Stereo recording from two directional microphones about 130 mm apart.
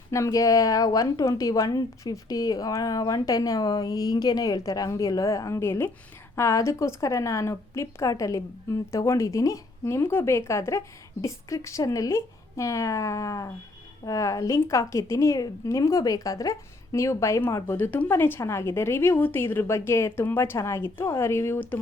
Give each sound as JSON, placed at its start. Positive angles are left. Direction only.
{"t": 0.1, "sound": "a woman's voice", "side_deg": 25}